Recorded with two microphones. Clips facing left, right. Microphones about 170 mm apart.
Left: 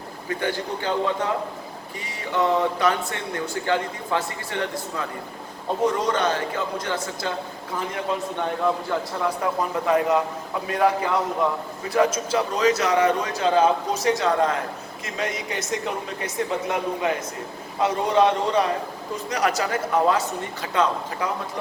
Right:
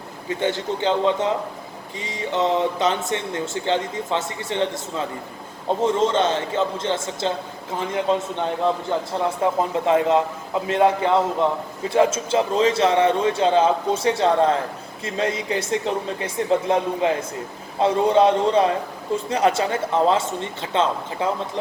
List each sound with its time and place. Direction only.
0.3 s speech: 20° right (ahead or behind)
9.4 s speech: 25° right (ahead or behind)